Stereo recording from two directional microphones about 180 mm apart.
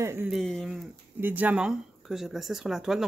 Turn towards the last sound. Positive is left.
turn(degrees=0)  # may be behind; listen again after turning